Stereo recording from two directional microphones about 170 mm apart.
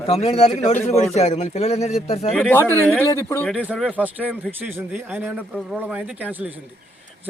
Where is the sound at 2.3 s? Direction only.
10° left (ahead or behind).